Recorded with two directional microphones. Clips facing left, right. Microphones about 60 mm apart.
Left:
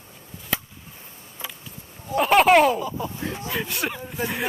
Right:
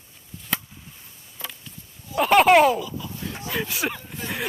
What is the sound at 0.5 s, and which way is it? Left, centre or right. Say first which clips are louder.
Chop: left 1 dB; centre.